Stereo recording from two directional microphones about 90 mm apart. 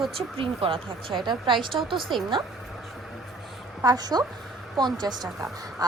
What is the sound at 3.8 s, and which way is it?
Speech, 45° right (ahead or behind).